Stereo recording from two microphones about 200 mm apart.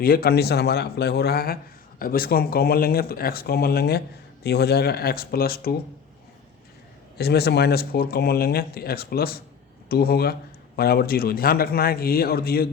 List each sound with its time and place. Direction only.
0.0 s speech: 50° left (ahead or behind)
7.2 s speech: 55° left (ahead or behind)